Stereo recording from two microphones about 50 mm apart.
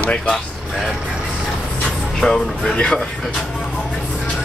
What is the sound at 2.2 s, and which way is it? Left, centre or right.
Speech, centre.